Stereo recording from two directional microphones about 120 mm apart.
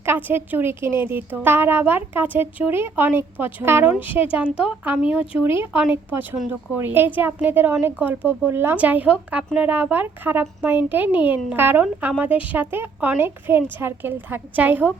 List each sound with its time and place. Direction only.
0.0 s a woman's voice: 15° right (ahead or behind)